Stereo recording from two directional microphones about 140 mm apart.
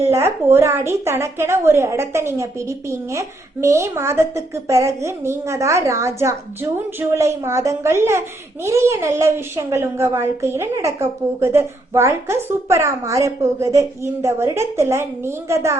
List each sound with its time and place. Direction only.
0.0 s a woman's voice: 20° right (ahead or behind)